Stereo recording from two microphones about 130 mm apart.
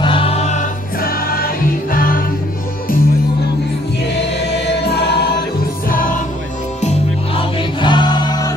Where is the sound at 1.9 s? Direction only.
90° left.